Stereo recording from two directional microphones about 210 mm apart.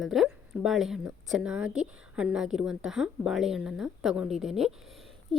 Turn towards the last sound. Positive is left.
turn(degrees=0)  # may be behind; listen again after turning